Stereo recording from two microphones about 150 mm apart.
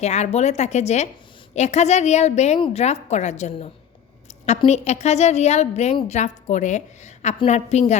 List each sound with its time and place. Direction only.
0.0 s a woman's voice: 45° left (ahead or behind)